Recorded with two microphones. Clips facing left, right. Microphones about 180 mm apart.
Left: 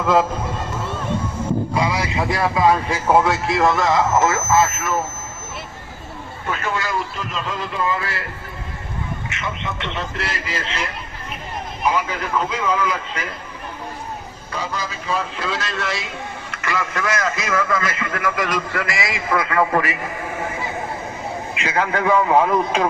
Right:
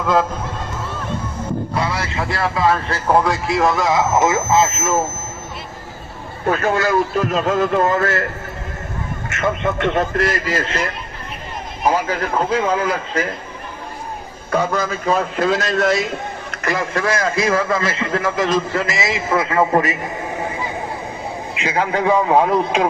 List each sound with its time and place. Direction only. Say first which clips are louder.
0.0 s speech: even; 5° left (ahead or behind); by 4.9 s 20° right (ahead or behind)
6.4 s a man's voice: right 8 dB; 40° right (ahead or behind)
9.3 s a man's voice: right 8 dB; 45° right (ahead or behind)
12.5 s a man's voice: right 4 dB; 50° right (ahead or behind)
14.5 s a man's voice: right 9 dB; 50° right (ahead or behind); by 22.9 s 20° right (ahead or behind)